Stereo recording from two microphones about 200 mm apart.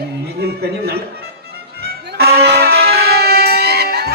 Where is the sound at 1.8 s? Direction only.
50° right (ahead or behind).